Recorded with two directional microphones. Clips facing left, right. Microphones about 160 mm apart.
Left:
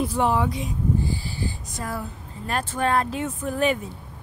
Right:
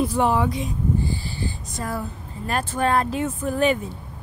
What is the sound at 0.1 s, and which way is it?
Speech, centre (ahead or behind).